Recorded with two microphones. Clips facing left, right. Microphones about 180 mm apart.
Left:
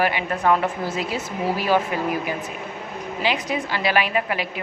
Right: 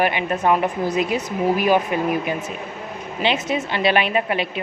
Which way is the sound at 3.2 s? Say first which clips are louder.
Right 3 dB; 25° right (ahead or behind).